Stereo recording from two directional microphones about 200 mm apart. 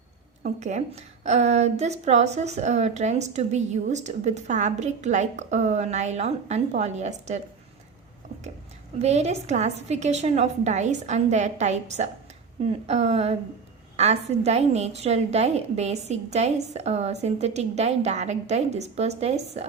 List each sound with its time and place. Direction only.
0.4 s a woman's voice: 35° right (ahead or behind)
9.0 s a woman's voice: 35° right (ahead or behind)